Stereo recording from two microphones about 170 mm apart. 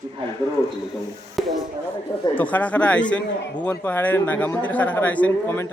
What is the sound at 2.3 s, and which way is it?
A man's voice, 10° left (ahead or behind).